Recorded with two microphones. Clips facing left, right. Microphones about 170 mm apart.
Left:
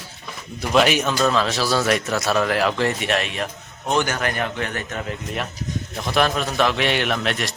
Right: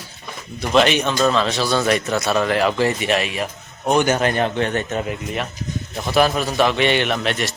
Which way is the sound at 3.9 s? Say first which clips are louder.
Right 5 dB; 20° right (ahead or behind).